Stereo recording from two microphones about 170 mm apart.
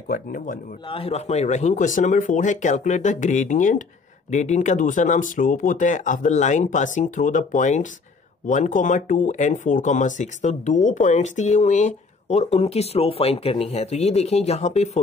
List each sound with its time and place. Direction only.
0.1 s speech: 55° left (ahead or behind)
0.8 s speech: 35° left (ahead or behind)